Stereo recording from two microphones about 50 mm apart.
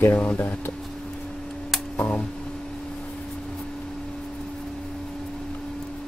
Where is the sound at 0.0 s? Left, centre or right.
Left.